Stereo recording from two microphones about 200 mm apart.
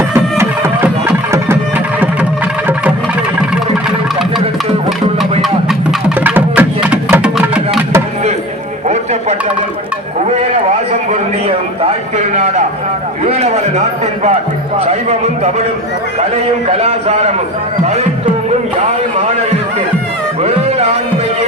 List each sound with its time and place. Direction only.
0.1 s music: 15° right (ahead or behind)
5.4 s music: 5° right (ahead or behind)
12.1 s a sound: 35° right (ahead or behind)
16.7 s a sound: 35° right (ahead or behind)
17.8 s music: 35° right (ahead or behind)
20.4 s music: 30° right (ahead or behind)